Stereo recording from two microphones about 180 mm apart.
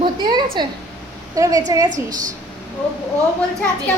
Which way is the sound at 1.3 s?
20° right (ahead or behind).